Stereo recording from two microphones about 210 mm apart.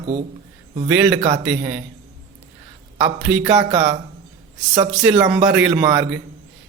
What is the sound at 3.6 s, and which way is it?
Speech, 30° right (ahead or behind).